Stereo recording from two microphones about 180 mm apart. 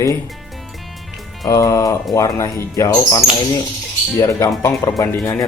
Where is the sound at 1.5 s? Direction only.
15° left (ahead or behind).